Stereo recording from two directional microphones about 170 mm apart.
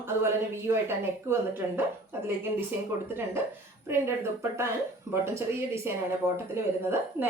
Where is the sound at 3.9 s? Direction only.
15° right (ahead or behind).